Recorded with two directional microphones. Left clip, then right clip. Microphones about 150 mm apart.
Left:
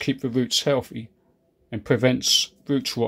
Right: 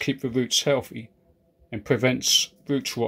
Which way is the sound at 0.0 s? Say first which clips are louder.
Left 1 dB; 5° left (ahead or behind).